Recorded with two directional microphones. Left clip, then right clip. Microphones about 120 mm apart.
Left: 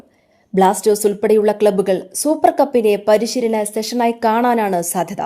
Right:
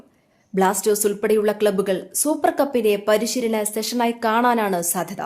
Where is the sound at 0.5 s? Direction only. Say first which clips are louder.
Left 5 dB; 35° left (ahead or behind).